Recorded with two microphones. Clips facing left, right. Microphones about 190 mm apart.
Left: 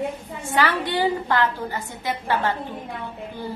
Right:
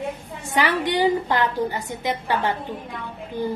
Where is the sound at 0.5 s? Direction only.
15° right (ahead or behind).